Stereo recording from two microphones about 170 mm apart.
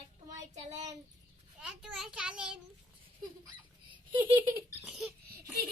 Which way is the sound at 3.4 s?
30° right (ahead or behind).